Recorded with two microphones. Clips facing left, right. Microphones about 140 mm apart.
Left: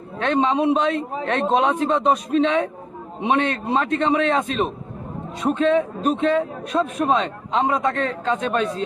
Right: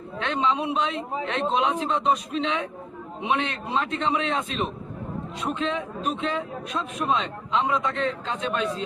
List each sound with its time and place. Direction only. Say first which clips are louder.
0.2 s speech: left 6 dB; 50° left (ahead or behind)